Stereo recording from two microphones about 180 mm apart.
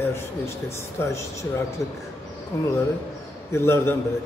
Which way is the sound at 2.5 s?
15° left (ahead or behind).